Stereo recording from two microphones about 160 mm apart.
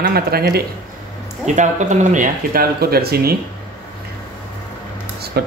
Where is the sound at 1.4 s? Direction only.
50° right (ahead or behind); by 3.4 s 75° right (ahead or behind).